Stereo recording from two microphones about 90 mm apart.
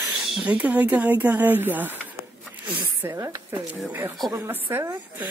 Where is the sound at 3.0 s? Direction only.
30° right (ahead or behind).